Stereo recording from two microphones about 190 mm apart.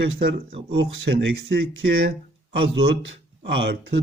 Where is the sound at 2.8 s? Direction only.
60° right (ahead or behind).